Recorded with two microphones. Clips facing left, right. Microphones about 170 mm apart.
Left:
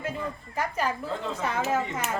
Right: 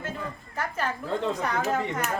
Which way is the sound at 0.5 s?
10° left (ahead or behind).